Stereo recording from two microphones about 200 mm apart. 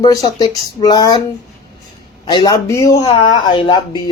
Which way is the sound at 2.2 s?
20° left (ahead or behind).